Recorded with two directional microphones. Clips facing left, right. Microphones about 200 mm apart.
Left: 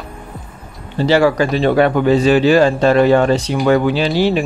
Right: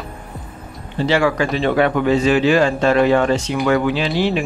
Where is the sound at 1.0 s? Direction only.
35° left (ahead or behind).